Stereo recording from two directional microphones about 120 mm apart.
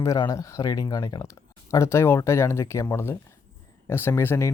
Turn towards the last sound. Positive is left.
turn(degrees=20)  # may be behind; listen again after turning